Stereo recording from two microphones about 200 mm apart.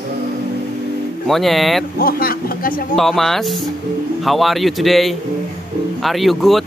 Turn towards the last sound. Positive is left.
turn(degrees=0)  # may be behind; listen again after turning